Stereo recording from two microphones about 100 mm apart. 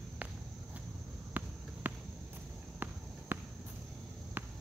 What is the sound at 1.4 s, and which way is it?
Basketball bounce, 20° right (ahead or behind).